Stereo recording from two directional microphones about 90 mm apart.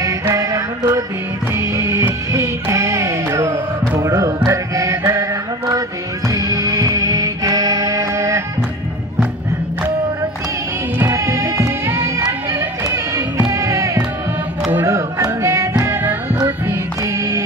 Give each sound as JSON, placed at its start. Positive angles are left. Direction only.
{"t": 0.0, "sound": "music", "side_deg": -40}
{"t": 11.0, "sound": "music", "side_deg": -35}
{"t": 17.0, "sound": "music", "side_deg": -35}